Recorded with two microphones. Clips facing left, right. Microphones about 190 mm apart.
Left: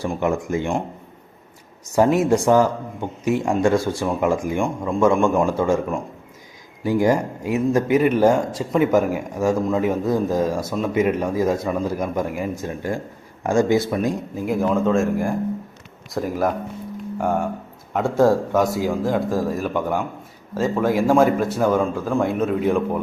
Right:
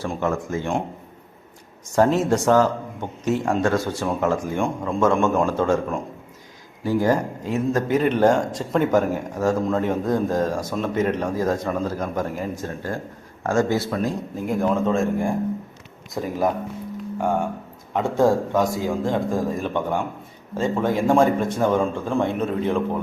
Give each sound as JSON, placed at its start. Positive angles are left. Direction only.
{"t": 0.0, "sound": "speech", "side_deg": 15}
{"t": 1.9, "sound": "a man's voice", "side_deg": 10}
{"t": 6.8, "sound": "a man's voice", "side_deg": 15}
{"t": 14.4, "sound": "speech", "side_deg": 0}
{"t": 18.5, "sound": "speech", "side_deg": 10}